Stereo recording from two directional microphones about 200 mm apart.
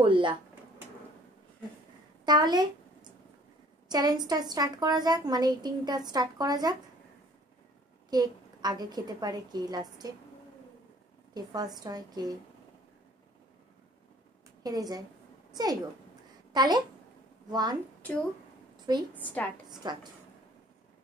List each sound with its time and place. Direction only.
0.0 s a woman's voice: 25° right (ahead or behind)
2.2 s a sound: 20° right (ahead or behind)
3.9 s a woman's voice: 20° right (ahead or behind)
8.1 s a woman's voice: 20° right (ahead or behind)
11.3 s a woman's voice: 20° right (ahead or behind)
14.6 s a woman's voice: 20° right (ahead or behind)
19.1 s a woman's voice: 5° left (ahead or behind)
19.8 s a woman's voice: 20° right (ahead or behind)